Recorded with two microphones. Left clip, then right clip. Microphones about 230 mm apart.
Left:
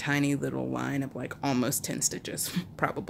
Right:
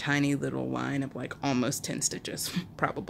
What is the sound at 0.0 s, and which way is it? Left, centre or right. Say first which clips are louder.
Speech: even; centre.